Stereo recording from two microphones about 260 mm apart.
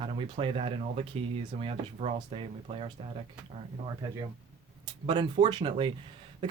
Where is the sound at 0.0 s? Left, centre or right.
Centre.